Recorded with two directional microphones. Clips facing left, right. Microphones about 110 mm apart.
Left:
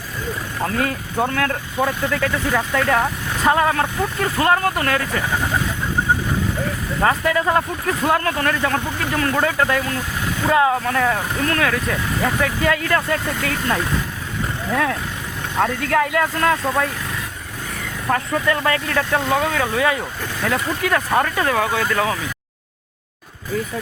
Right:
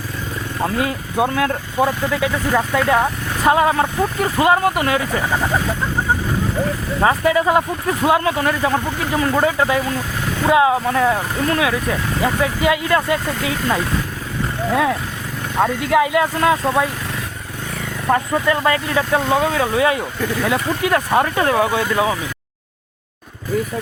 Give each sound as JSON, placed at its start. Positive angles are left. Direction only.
{"t": 0.6, "sound": "speech", "side_deg": -15}
{"t": 7.0, "sound": "speech", "side_deg": -10}
{"t": 18.3, "sound": "speech", "side_deg": -25}
{"t": 18.7, "sound": "speech", "side_deg": -10}